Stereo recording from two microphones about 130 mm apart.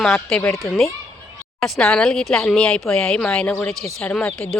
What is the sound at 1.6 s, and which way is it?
Speech, 5° left (ahead or behind).